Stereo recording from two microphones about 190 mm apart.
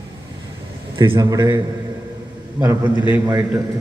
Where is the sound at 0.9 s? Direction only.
25° right (ahead or behind).